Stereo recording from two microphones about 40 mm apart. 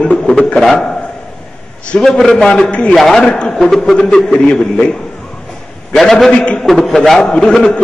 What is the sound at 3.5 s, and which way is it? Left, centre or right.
Speech, centre.